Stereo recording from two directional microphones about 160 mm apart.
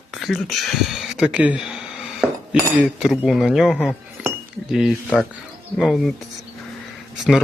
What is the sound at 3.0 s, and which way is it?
Speech, centre (ahead or behind).